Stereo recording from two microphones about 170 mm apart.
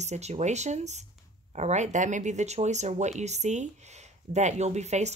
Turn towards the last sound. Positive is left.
turn(degrees=-40)  # may be behind; listen again after turning